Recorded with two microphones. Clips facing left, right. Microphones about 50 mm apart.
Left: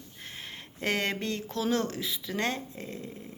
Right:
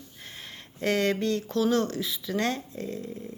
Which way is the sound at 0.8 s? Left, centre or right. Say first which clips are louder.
Right 4 dB; left.